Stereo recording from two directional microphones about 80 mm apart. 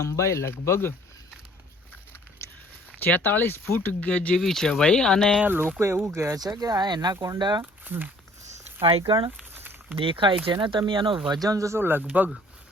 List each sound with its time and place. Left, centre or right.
0.0 s speech: left
3.1 s speech: left
4.0 s speech: centre
4.4 s speech: centre
5.4 s speech: right
6.3 s speech: right
7.9 s speech: right
9.0 s speech: right
9.4 s a sound: right
10.0 s speech: right
11.3 s speech: right
11.8 s speech: right